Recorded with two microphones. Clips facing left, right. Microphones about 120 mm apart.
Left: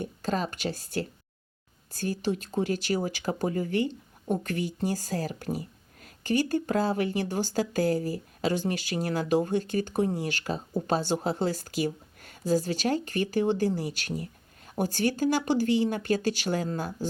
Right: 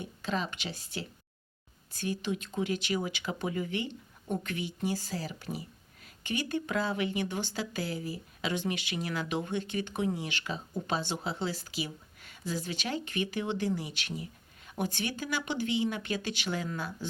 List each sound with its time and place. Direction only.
0.0 s speech: 45° left (ahead or behind)